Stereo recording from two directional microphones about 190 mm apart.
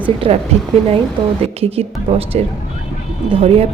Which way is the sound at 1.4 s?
30° right (ahead or behind).